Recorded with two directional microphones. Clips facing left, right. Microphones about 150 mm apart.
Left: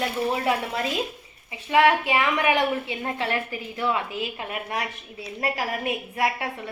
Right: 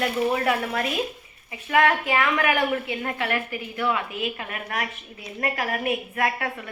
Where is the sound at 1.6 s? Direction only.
20° left (ahead or behind).